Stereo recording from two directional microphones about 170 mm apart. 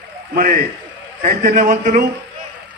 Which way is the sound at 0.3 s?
55° right (ahead or behind).